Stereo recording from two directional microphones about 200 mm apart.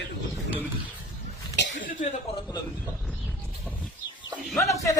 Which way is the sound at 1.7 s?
40° left (ahead or behind).